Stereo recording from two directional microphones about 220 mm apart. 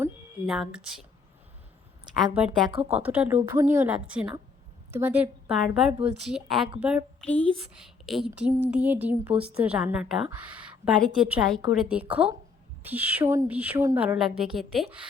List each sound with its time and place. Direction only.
0.0 s a sound: centre (ahead or behind)
2.1 s a woman's voice: centre (ahead or behind)
2.5 s speech: 20° right (ahead or behind)
2.9 s a woman's voice: 5° right (ahead or behind)
7.3 s speech: 5° left (ahead or behind)
8.3 s a woman's voice: 15° right (ahead or behind)